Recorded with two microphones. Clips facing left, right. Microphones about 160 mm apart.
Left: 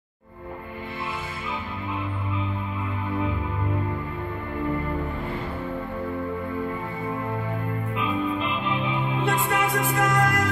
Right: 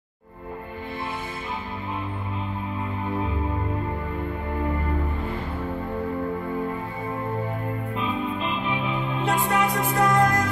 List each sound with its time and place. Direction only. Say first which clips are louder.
9.2 s music: right 2 dB; 35° right (ahead or behind)